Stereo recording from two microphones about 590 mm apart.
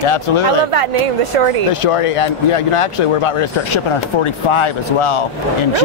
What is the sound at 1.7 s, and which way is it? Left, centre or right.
Speech, left.